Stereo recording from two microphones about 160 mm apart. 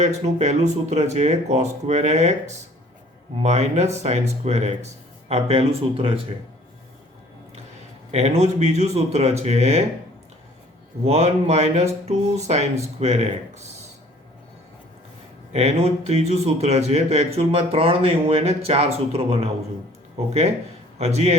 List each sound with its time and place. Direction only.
0.0 s speech: 45° right (ahead or behind)
8.1 s speech: 45° right (ahead or behind)
11.0 s speech: 40° right (ahead or behind)
15.5 s speech: 40° right (ahead or behind)
21.0 s speech: 40° right (ahead or behind)